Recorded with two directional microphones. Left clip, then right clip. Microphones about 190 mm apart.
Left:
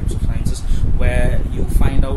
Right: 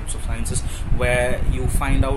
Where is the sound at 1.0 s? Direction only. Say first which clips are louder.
Right 3 dB; 10° left (ahead or behind).